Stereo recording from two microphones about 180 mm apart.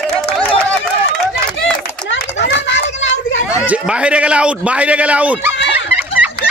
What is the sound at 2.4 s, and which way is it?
Children playing, 90° left.